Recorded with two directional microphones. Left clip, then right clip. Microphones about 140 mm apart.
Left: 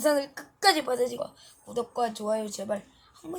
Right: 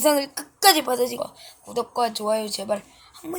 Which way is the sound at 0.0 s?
10° right (ahead or behind).